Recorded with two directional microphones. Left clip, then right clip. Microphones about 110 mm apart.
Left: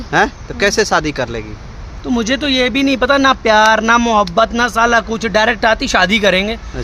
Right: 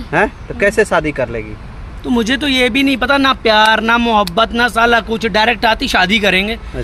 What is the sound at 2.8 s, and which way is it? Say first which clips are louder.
Speech: even; 20° left (ahead or behind).